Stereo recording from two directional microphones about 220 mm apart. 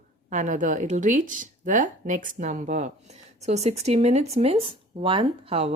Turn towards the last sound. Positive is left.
turn(degrees=-30)  # may be behind; listen again after turning